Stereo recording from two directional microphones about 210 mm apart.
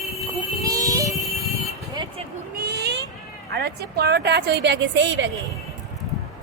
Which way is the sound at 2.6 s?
50° right (ahead or behind).